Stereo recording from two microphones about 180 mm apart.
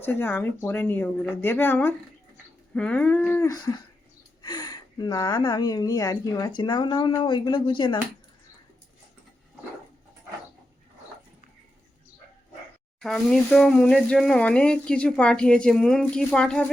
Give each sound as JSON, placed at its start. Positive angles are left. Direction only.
{"t": 0.0, "sound": "speech", "side_deg": 10}
{"t": 13.0, "sound": "speech", "side_deg": 0}